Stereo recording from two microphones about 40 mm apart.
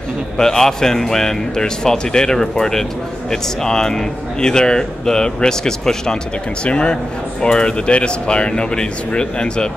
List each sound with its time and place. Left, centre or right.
0.4 s speech: centre